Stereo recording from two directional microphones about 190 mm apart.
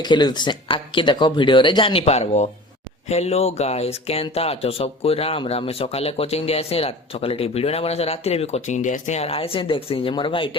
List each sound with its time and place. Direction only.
0.0 s speech: 20° left (ahead or behind)